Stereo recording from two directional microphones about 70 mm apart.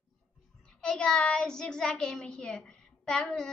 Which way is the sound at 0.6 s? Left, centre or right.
Centre.